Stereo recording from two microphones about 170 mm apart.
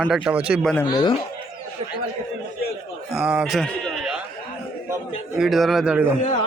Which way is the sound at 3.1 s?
5° right (ahead or behind).